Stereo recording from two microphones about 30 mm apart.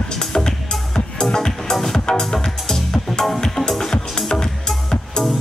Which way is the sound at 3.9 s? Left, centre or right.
Left.